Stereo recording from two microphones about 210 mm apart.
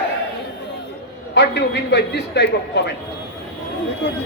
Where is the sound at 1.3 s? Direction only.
55° left (ahead or behind).